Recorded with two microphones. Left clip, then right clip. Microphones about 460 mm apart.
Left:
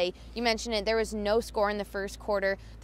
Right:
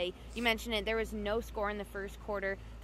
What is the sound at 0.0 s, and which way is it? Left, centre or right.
Speech, left.